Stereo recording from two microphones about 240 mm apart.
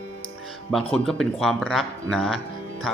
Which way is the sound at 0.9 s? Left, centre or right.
Centre.